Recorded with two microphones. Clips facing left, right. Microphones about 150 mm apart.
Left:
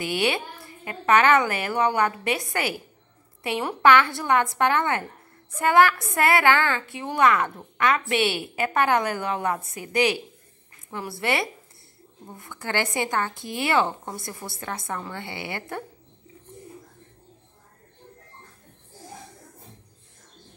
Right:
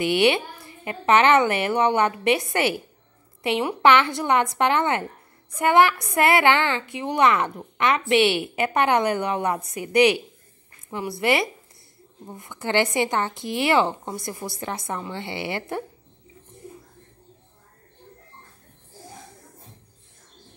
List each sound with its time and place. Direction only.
0.0 s a woman's voice: 20° right (ahead or behind)